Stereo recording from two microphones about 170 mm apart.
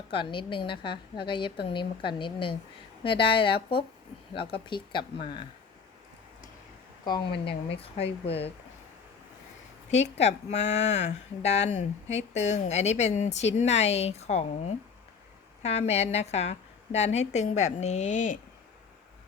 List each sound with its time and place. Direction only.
0.1 s a woman's voice: 30° left (ahead or behind)
7.0 s a woman's voice: 25° left (ahead or behind)
9.9 s a woman's voice: 40° left (ahead or behind)